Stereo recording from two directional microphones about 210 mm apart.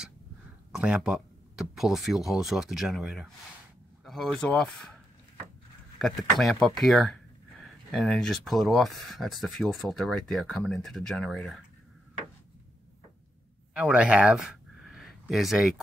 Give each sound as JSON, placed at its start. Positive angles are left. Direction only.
{"t": 0.7, "sound": "speech", "side_deg": -5}
{"t": 5.9, "sound": "speech", "side_deg": 0}
{"t": 13.7, "sound": "speech", "side_deg": -5}